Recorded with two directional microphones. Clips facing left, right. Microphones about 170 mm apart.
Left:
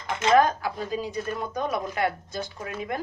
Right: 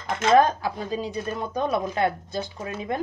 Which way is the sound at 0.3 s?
25° right (ahead or behind).